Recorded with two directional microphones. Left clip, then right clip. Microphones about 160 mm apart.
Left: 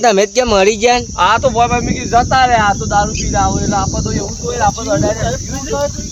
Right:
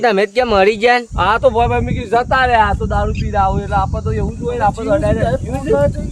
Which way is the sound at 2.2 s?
35° right (ahead or behind).